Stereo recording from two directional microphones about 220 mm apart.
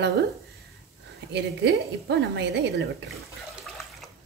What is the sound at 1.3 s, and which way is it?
A woman's voice, 50° right (ahead or behind).